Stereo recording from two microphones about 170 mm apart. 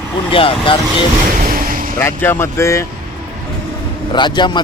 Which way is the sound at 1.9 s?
15° left (ahead or behind).